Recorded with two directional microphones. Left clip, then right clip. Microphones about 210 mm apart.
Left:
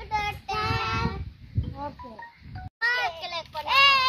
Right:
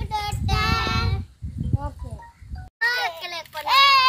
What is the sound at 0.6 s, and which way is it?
Child singing, centre (ahead or behind).